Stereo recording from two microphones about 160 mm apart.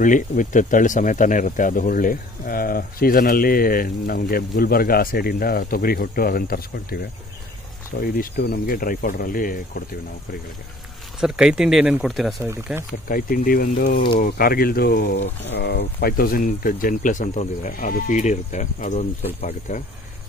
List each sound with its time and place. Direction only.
0.0 s speech: 55° left (ahead or behind)
11.1 s speech: 5° right (ahead or behind)
12.4 s speech: 15° right (ahead or behind)
13.1 s speech: 60° left (ahead or behind); by 19.8 s 45° left (ahead or behind)